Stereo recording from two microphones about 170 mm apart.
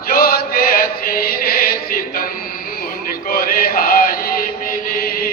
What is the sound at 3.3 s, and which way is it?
Chant, 60° left (ahead or behind).